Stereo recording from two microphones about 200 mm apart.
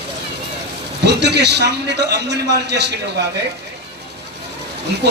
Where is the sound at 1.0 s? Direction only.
55° right (ahead or behind).